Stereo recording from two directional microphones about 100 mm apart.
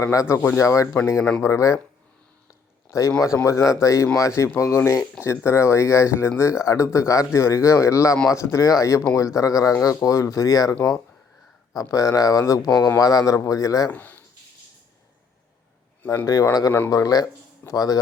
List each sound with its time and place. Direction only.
0.0 s speech: 30° left (ahead or behind)
0.3 s speech: 20° left (ahead or behind)
0.6 s speech: 35° left (ahead or behind)
2.9 s speech: 30° left (ahead or behind)
10.8 s speech: 5° left (ahead or behind)
11.7 s speech: 35° left (ahead or behind)
13.9 s speech: 15° left (ahead or behind)
16.2 s speech: 35° left (ahead or behind)